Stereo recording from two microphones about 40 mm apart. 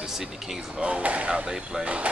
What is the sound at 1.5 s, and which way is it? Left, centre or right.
Speech, centre.